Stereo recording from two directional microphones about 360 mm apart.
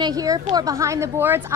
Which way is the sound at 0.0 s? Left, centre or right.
Centre.